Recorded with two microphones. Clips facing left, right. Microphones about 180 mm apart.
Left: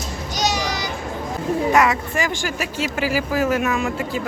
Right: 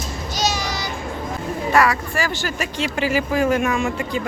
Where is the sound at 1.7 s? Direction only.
20° left (ahead or behind).